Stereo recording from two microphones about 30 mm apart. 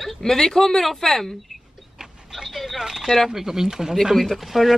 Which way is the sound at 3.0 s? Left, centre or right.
Centre.